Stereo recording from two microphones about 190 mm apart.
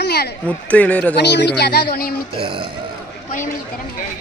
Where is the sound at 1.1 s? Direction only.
60° left (ahead or behind).